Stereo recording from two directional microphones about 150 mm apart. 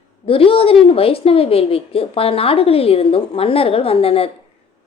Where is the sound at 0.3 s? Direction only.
40° left (ahead or behind).